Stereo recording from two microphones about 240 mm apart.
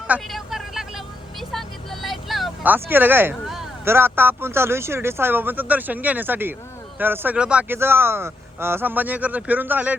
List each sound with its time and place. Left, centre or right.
0.1 s vehicle: centre
7.0 s speech: centre